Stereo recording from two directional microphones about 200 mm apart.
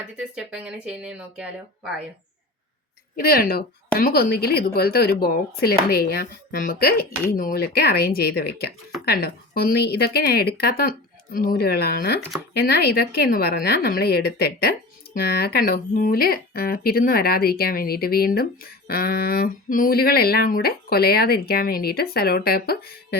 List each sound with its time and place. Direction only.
0.2 s speech: 5° right (ahead or behind)
3.2 s a woman's voice: 50° left (ahead or behind)